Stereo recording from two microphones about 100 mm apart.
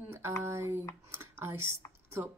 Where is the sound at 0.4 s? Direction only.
25° right (ahead or behind).